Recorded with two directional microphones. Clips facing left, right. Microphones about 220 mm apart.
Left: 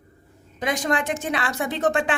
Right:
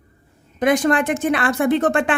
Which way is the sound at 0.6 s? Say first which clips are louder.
Right 7 dB; 55° right (ahead or behind).